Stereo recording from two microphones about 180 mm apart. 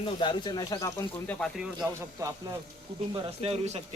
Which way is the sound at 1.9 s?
15° right (ahead or behind).